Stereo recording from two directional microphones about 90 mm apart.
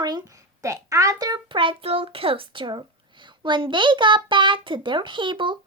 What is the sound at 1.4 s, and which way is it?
A child's voice, 70° right (ahead or behind).